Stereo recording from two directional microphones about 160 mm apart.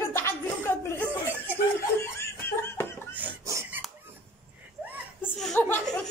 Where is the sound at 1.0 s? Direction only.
10° right (ahead or behind).